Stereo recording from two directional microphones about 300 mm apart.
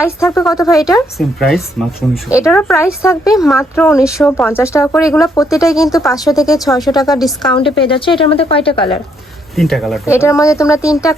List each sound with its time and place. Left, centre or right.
0.0 s speech: centre
1.4 s speech: centre
9.6 s speech: centre